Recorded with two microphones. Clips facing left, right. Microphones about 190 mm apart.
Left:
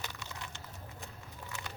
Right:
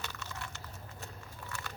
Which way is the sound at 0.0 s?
15° left (ahead or behind).